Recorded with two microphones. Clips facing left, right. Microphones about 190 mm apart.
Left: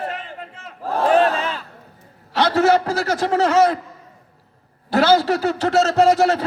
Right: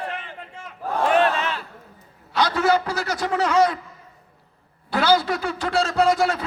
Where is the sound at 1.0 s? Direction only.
35° left (ahead or behind).